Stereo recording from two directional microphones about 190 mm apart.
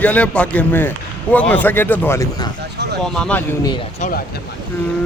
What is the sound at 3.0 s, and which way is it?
Speech, 5° left (ahead or behind).